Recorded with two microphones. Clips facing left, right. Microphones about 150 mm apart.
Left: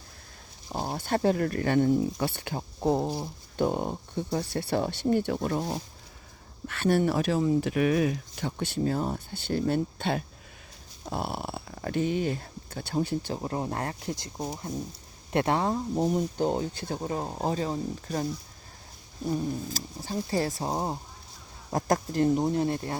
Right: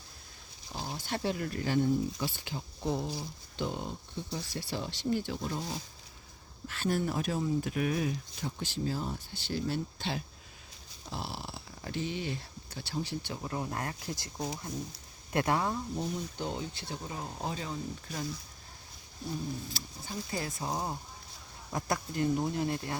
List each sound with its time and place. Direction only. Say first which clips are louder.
0.7 s speech: left 8 dB; 55° left (ahead or behind)
2.8 s speech: left 8 dB; 40° left (ahead or behind)
13.3 s speech: left 5 dB; 35° left (ahead or behind)
19.7 s speech: left 7 dB; 40° left (ahead or behind)
21.7 s speech: left 7 dB; 45° left (ahead or behind)